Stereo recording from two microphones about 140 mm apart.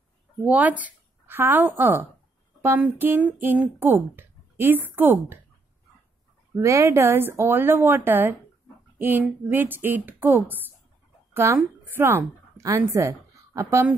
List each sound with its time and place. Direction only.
0.4 s a woman's voice: 10° right (ahead or behind)
6.5 s a woman's voice: 20° right (ahead or behind)